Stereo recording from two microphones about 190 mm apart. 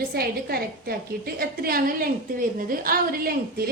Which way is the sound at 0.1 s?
55° right (ahead or behind).